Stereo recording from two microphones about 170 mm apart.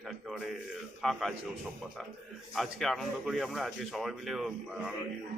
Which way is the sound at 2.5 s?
Centre (ahead or behind).